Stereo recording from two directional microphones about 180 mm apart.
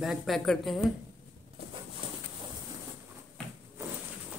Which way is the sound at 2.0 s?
30° right (ahead or behind).